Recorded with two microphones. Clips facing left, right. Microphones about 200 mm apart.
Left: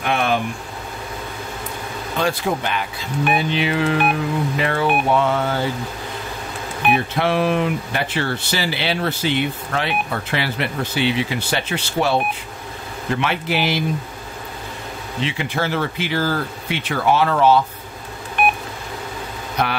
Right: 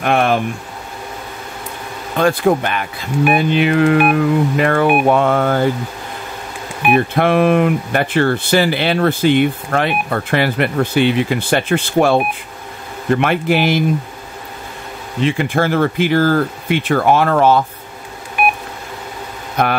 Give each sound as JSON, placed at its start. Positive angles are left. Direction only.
{"t": 0.0, "sound": "speech", "side_deg": -55}
{"t": 2.1, "sound": "speech", "side_deg": -55}
{"t": 6.9, "sound": "speech", "side_deg": -55}
{"t": 15.2, "sound": "speech", "side_deg": -50}